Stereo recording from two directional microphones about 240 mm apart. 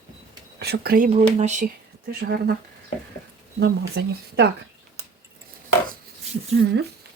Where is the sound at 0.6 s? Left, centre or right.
Right.